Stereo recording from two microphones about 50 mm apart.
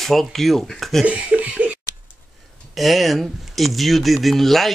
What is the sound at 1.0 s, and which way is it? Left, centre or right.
Speech, right.